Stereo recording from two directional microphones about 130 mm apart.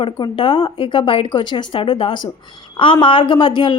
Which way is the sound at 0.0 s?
40° left (ahead or behind).